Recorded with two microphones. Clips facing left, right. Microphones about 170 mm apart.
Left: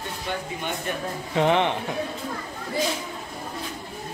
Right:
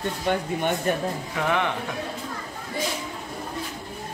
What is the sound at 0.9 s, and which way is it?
Speech, 45° right (ahead or behind).